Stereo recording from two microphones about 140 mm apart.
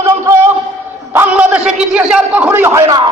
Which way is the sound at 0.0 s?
20° right (ahead or behind).